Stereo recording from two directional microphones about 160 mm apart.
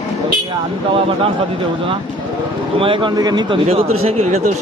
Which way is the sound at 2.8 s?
30° right (ahead or behind).